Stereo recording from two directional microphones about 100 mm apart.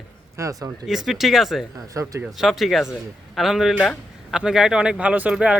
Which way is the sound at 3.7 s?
15° left (ahead or behind).